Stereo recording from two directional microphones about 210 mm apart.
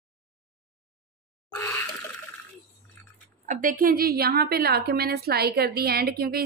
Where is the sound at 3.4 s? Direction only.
40° right (ahead or behind).